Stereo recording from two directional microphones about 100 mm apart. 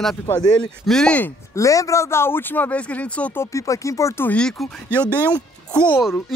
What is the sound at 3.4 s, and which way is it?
Speech, 30° left (ahead or behind).